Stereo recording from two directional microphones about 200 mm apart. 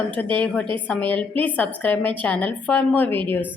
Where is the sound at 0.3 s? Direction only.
5° left (ahead or behind).